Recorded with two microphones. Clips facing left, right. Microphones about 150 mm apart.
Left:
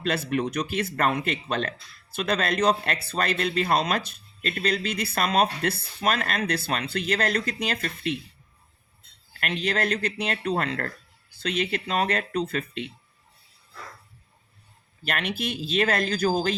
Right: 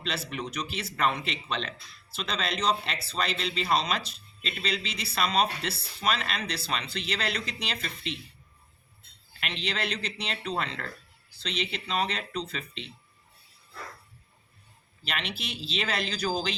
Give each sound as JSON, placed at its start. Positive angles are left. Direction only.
{"t": 0.0, "sound": "speech", "side_deg": 50}
{"t": 9.4, "sound": "speech", "side_deg": 50}
{"t": 15.0, "sound": "speech", "side_deg": 50}